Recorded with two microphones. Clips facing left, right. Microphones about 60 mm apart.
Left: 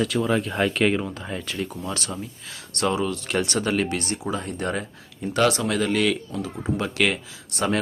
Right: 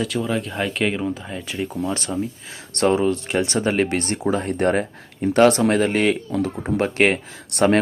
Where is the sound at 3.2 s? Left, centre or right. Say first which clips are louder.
Right 3 dB; right.